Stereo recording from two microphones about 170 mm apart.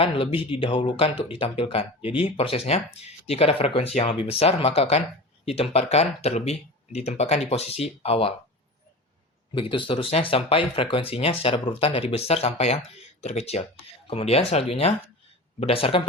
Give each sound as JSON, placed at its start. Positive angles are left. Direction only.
{"t": 0.0, "sound": "speech", "side_deg": 35}
{"t": 9.6, "sound": "speech", "side_deg": 30}